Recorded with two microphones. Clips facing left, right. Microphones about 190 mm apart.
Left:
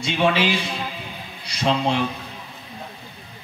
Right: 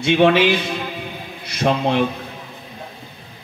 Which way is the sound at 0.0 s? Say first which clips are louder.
Right 6 dB; 60° right (ahead or behind).